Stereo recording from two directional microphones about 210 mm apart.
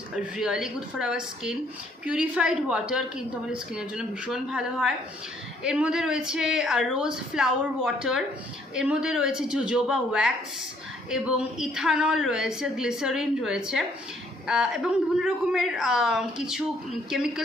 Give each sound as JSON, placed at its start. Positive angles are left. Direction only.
{"t": 0.1, "sound": "a woman's voice", "side_deg": -5}